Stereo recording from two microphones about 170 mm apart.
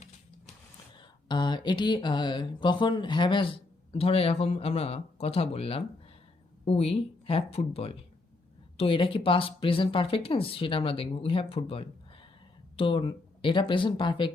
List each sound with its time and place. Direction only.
0.9 s speech: 25° left (ahead or behind)